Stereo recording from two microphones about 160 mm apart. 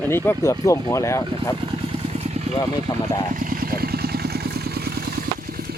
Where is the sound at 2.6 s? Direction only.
25° left (ahead or behind).